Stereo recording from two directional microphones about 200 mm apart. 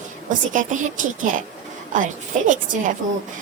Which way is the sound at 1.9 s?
40° right (ahead or behind).